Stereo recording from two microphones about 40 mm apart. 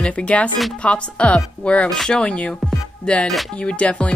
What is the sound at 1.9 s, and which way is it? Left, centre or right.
Speech, centre.